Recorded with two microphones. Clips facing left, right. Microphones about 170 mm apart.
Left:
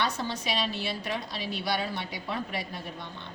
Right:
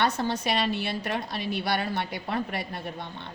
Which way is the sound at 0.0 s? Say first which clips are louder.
Right 5 dB; 55° right (ahead or behind).